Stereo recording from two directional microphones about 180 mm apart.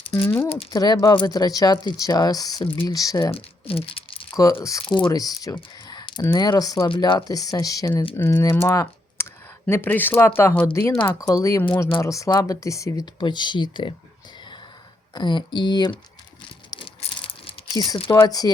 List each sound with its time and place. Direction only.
0.1 s speech: 15° left (ahead or behind)
3.3 s typing: 30° left (ahead or behind)
4.6 s speech: 20° left (ahead or behind)
8.6 s clicking: 15° left (ahead or behind)
9.6 s speech: 10° left (ahead or behind)
15.1 s speech: 25° left (ahead or behind)
16.7 s a sound: 30° left (ahead or behind)